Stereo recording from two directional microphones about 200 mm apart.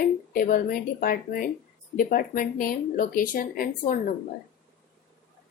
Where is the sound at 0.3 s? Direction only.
45° left (ahead or behind).